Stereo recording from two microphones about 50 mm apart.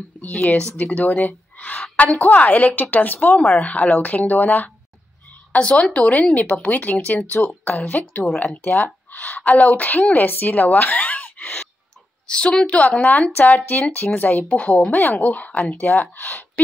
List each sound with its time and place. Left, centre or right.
0.2 s a woman's voice: left
5.6 s speech: centre
6.7 s a woman's voice: left
12.3 s speech: centre
13.4 s a woman's voice: left